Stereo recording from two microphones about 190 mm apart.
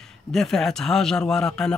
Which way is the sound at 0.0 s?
Centre (ahead or behind).